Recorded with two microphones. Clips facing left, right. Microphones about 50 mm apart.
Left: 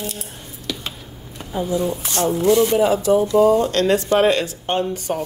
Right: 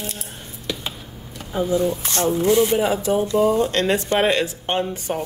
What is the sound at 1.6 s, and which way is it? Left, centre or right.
Speech, right.